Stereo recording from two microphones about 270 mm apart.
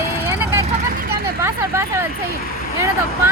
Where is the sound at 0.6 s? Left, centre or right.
Right.